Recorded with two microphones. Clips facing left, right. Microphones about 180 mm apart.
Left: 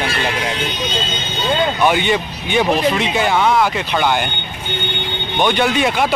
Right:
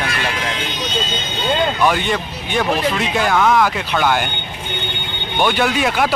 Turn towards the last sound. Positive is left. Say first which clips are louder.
# left 1 dB
turn(degrees=0)  # may be behind; listen again after turning